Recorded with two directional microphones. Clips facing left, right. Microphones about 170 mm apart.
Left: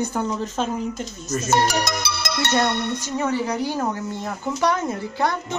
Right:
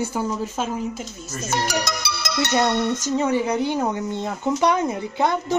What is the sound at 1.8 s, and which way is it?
Music, 55° left (ahead or behind).